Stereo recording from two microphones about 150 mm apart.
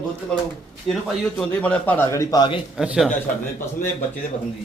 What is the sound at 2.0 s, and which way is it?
Speech, 25° left (ahead or behind).